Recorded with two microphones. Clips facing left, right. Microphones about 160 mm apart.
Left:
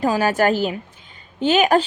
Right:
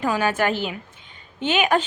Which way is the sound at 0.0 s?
35° left (ahead or behind).